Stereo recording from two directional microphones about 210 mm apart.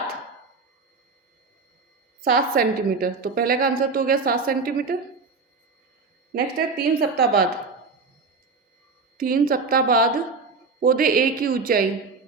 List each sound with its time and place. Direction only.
2.2 s a woman's voice: 45° right (ahead or behind)
6.3 s a woman's voice: 45° right (ahead or behind)
9.1 s a woman's voice: 45° right (ahead or behind)